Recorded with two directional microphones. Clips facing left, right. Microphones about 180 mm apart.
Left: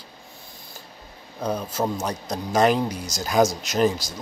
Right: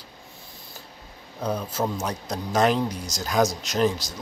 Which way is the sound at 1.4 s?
10° left (ahead or behind).